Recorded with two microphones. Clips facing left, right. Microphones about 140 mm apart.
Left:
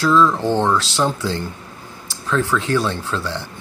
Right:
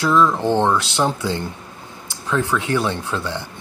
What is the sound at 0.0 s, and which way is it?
Speech, 15° right (ahead or behind).